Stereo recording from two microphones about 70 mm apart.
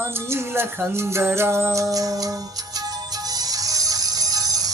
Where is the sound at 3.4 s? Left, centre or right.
Right.